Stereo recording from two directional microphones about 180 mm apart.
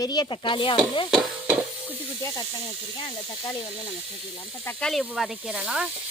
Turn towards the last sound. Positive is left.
turn(degrees=-5)  # may be behind; listen again after turning